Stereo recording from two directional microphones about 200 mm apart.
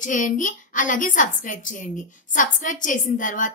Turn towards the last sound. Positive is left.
turn(degrees=40)  # may be behind; listen again after turning